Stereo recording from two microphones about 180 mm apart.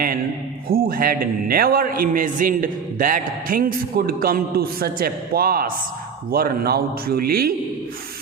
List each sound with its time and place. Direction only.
0.7 s a man's voice: 55° right (ahead or behind)